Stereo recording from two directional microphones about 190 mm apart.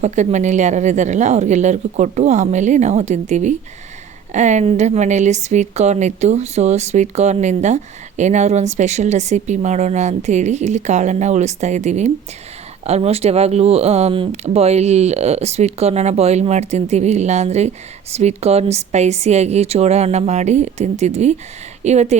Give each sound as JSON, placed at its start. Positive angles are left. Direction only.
{"t": 0.0, "sound": "a woman's voice", "side_deg": -40}